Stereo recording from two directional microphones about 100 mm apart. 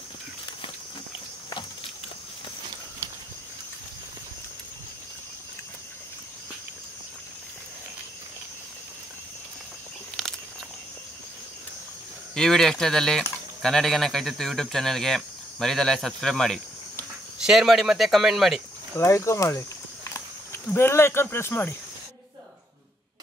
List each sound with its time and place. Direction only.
12.4 s speech: 5° left (ahead or behind)
18.9 s speech: 30° left (ahead or behind)